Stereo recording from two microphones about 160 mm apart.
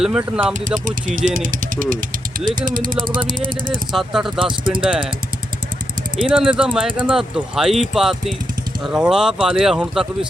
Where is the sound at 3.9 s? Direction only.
Centre (ahead or behind).